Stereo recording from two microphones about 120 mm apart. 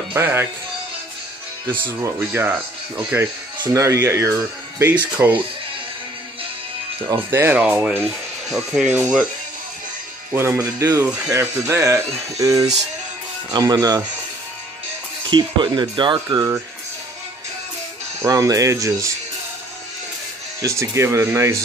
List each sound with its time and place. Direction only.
0.1 s speech: 20° right (ahead or behind)
1.7 s speech: 20° right (ahead or behind)
7.1 s speech: 25° right (ahead or behind)
8.0 s speech: centre (ahead or behind)
10.3 s speech: 20° right (ahead or behind)
15.2 s speech: 40° right (ahead or behind)
18.2 s speech: 25° right (ahead or behind)
20.6 s speech: 25° right (ahead or behind)